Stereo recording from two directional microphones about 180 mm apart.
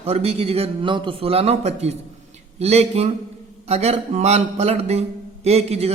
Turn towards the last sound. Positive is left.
turn(degrees=-35)  # may be behind; listen again after turning